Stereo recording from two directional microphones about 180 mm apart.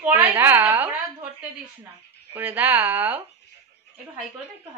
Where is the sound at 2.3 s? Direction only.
10° right (ahead or behind).